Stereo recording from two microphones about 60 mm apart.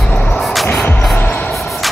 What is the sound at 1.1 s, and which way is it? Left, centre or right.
Music, left.